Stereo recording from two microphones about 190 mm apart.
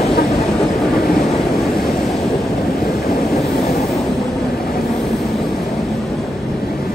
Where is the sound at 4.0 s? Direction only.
Centre (ahead or behind).